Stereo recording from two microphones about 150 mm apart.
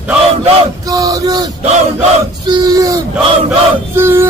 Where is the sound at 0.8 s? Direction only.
25° right (ahead or behind).